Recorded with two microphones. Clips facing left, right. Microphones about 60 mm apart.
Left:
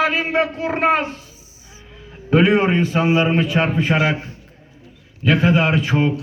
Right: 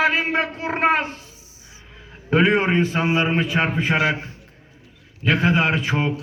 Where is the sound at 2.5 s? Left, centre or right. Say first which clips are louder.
Left 2 dB; right.